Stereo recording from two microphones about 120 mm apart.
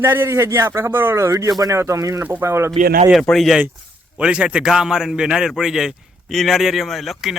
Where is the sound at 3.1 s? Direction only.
Centre (ahead or behind).